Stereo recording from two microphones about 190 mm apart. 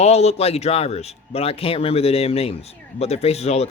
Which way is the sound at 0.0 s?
35° left (ahead or behind).